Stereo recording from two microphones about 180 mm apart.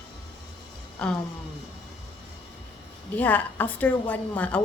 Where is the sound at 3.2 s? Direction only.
10° left (ahead or behind).